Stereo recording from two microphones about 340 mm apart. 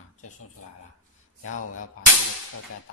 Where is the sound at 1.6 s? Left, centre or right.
Left.